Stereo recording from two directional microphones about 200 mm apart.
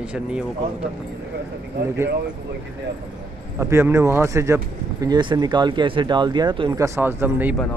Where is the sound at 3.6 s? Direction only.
15° right (ahead or behind).